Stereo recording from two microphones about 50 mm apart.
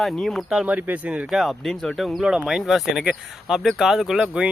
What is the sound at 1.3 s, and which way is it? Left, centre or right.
Speech, centre.